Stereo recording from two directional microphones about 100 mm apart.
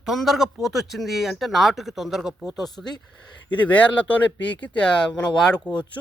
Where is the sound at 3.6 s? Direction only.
15° left (ahead or behind).